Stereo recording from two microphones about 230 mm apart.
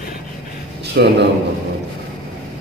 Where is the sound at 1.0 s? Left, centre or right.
Right.